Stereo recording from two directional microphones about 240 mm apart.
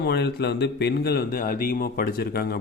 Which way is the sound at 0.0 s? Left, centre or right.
Left.